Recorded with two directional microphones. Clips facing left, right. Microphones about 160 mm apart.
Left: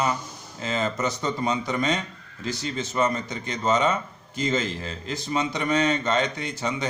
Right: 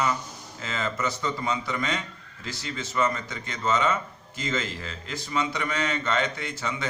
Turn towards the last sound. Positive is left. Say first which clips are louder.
# left 4 dB
turn(degrees=20)  # may be behind; listen again after turning